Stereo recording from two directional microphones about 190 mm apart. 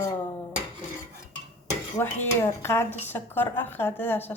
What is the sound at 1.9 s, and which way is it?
Dishes, 10° left (ahead or behind).